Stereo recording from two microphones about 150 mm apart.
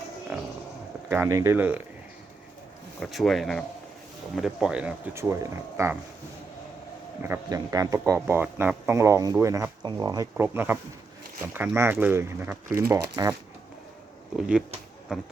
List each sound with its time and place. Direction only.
1.1 s speech: 20° right (ahead or behind)
3.0 s speech: centre (ahead or behind)
5.3 s speech: 20° right (ahead or behind)
7.2 s speech: 20° right (ahead or behind)
10.3 s speech: 15° right (ahead or behind)
14.3 s speech: 5° right (ahead or behind)